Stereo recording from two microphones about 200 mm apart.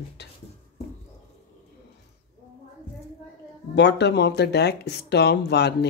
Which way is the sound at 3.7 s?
55° left (ahead or behind).